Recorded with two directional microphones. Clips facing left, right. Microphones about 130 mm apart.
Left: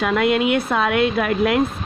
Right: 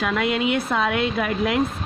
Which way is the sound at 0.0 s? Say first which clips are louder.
Left 4 dB; 55° left (ahead or behind).